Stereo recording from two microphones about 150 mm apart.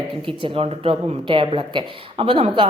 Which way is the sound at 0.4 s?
40° right (ahead or behind).